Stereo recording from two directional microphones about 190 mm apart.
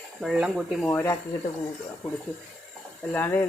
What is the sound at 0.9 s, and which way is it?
Speech, 15° left (ahead or behind).